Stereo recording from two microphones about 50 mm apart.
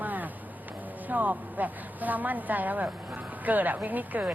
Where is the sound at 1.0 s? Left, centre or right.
Right.